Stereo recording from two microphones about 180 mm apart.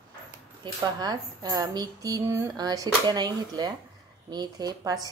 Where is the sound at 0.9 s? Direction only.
20° right (ahead or behind).